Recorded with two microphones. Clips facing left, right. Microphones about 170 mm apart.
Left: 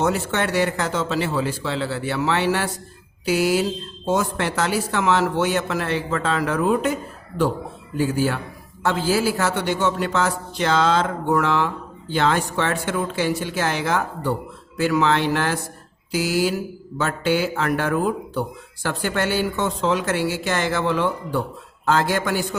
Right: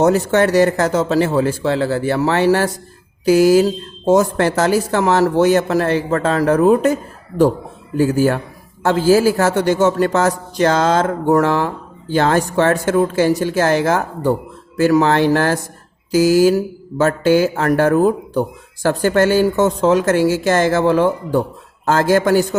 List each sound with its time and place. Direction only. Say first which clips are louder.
0.0 s a man's voice: right 8 dB; 40° right (ahead or behind)